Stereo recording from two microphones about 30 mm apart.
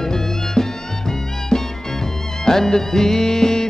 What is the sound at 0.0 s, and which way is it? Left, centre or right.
Music, centre.